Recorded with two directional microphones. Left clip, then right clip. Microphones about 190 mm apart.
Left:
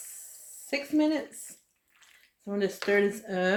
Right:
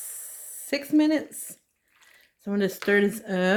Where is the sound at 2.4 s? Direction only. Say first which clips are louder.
Right 3 dB; 60° right (ahead or behind).